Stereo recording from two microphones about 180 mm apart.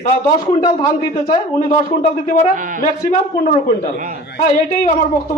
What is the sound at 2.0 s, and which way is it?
Speech, 45° left (ahead or behind).